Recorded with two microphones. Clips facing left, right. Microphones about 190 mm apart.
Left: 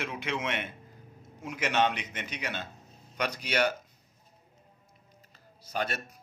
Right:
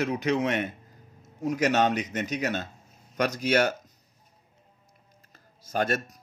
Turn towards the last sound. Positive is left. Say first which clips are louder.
# right 6 dB
turn(degrees=-45)  # may be behind; listen again after turning